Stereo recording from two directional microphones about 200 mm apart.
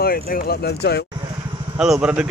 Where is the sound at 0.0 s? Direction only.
50° left (ahead or behind).